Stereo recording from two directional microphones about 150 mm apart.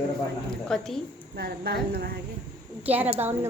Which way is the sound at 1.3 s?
90° right.